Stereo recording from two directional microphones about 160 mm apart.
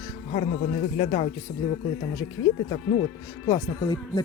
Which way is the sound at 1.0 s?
40° left (ahead or behind).